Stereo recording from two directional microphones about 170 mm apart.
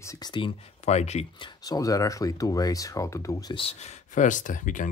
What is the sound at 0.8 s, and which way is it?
Speech, 40° left (ahead or behind).